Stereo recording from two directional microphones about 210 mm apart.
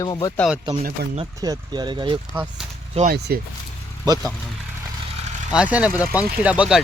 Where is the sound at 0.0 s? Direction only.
20° left (ahead or behind).